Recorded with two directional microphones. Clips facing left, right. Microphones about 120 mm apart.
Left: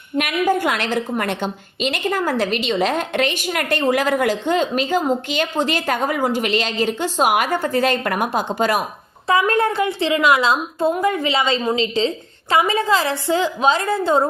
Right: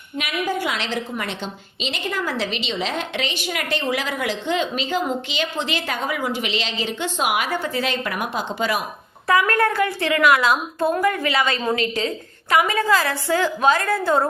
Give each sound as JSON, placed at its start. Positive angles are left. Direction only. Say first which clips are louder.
{"t": 0.2, "sound": "a woman's voice", "louder": "left 6 dB", "side_deg": 50}
{"t": 9.2, "sound": "a woman's voice", "louder": "left 1 dB", "side_deg": 25}